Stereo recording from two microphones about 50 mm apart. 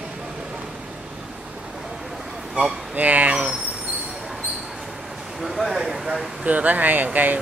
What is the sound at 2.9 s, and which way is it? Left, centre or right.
Speech, right.